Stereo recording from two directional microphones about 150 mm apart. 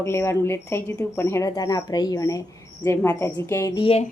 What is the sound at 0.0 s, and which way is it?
Speech, 15° left (ahead or behind).